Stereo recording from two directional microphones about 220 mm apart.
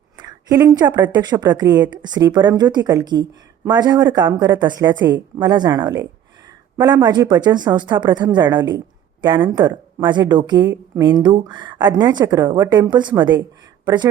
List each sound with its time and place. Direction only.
0.2 s a woman's voice: 20° right (ahead or behind)